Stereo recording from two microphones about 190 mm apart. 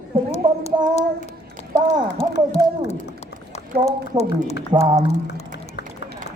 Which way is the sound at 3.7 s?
55° right (ahead or behind).